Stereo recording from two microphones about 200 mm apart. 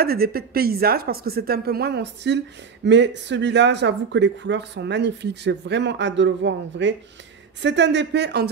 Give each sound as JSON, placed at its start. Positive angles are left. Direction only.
{"t": 0.0, "sound": "a woman's voice", "side_deg": -50}